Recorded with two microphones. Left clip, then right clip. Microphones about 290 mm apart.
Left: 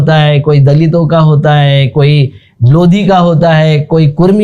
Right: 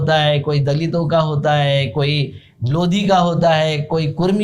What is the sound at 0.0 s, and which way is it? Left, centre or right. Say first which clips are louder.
Speech: left 6 dB; left.